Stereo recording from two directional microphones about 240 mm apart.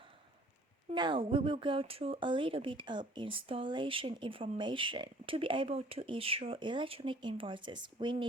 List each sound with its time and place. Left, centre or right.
0.9 s speech: centre